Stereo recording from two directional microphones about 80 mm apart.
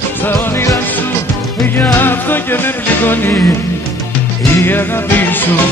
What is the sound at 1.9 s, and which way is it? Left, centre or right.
Music, left.